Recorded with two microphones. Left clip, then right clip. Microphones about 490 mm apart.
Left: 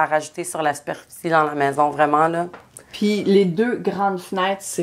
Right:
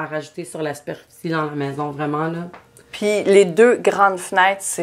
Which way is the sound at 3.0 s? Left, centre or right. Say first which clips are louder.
Right 3 dB; right.